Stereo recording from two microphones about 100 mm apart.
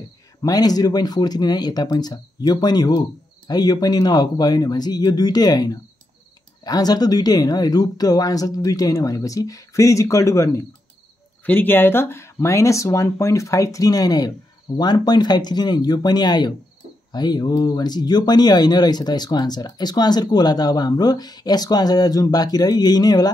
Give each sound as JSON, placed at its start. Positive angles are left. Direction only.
{"t": 0.4, "sound": "speech", "side_deg": 40}